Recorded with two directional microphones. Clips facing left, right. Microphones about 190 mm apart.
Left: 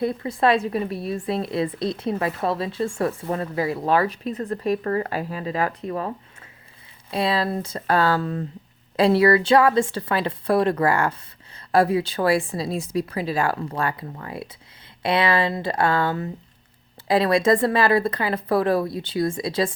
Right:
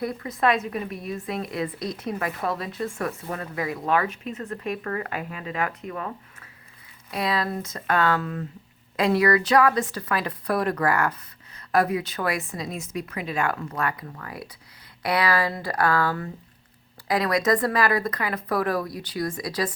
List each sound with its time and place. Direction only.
0.0 s a woman's voice: 25° left (ahead or behind)